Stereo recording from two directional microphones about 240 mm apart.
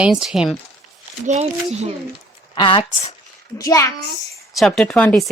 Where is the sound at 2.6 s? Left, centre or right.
Left.